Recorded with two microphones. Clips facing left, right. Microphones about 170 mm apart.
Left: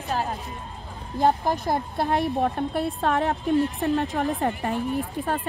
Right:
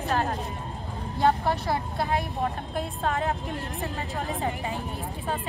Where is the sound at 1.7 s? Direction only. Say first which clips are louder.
Left 3 dB; 60° left (ahead or behind).